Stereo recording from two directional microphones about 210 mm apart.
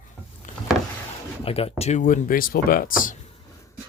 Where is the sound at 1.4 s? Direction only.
30° left (ahead or behind).